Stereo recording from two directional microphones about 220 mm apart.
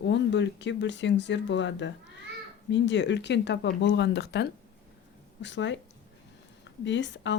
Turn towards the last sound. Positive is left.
turn(degrees=55)  # may be behind; listen again after turning